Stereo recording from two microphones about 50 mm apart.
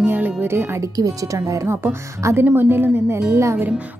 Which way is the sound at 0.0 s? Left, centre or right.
Right.